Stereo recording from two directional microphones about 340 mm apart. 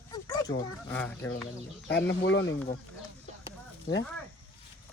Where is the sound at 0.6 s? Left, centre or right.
Centre.